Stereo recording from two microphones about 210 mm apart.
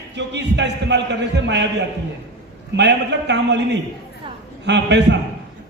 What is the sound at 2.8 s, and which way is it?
Speech, 55° right (ahead or behind).